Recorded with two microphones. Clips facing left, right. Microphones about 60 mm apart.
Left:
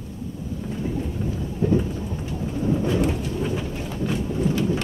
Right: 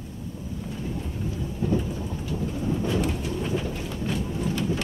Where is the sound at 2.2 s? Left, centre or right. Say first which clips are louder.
Left 4 dB; centre.